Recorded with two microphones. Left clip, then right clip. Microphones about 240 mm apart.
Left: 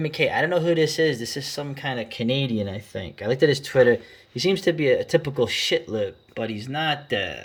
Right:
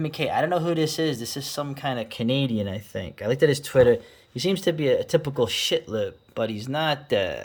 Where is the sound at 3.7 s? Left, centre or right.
Right.